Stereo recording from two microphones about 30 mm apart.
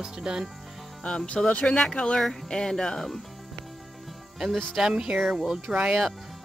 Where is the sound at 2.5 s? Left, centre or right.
Left.